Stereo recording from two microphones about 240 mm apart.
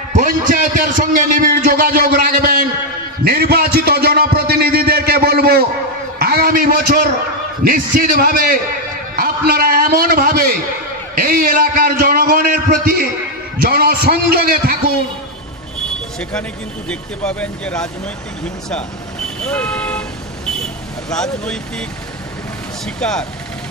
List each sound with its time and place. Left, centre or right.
0.1 s a sound: right
6.1 s a man's voice: right
17.2 s speech: centre
19.4 s vehicle: centre
21.1 s speech: centre
22.9 s speech: centre